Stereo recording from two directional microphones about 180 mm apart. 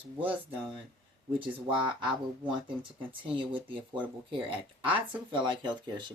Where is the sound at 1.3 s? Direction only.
30° right (ahead or behind).